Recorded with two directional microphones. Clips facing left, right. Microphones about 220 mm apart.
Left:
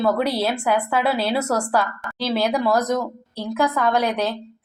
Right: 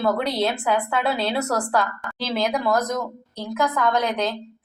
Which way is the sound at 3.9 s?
10° left (ahead or behind).